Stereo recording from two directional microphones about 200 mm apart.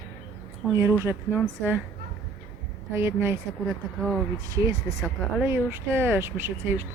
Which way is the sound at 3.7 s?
Centre (ahead or behind).